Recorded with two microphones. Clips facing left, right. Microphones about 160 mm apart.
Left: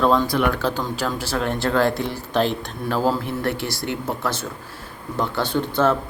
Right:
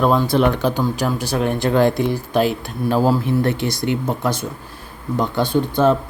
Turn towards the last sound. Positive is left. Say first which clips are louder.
# right 4 dB
turn(degrees=-15)  # may be behind; listen again after turning